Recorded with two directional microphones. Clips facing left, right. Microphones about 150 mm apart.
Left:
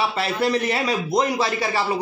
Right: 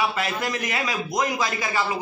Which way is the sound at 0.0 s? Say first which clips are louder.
Left 3 dB; 30° left (ahead or behind).